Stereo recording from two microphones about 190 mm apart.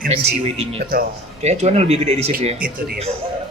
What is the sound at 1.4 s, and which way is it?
A man's voice, 35° right (ahead or behind).